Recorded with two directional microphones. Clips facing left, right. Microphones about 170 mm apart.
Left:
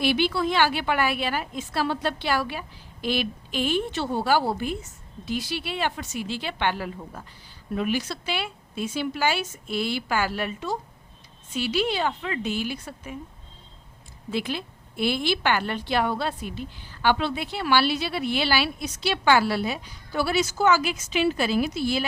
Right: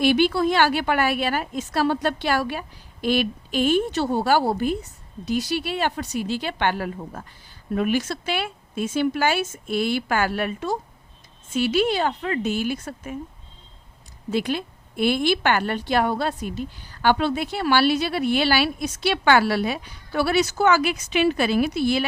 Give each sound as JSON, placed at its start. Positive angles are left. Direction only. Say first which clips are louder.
{"t": 0.0, "sound": "a woman's voice", "louder": "right 5 dB", "side_deg": -45}
{"t": 14.3, "sound": "a woman's voice", "louder": "right 4 dB", "side_deg": -45}